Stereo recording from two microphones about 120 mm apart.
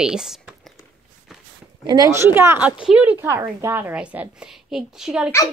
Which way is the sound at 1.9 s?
30° right (ahead or behind).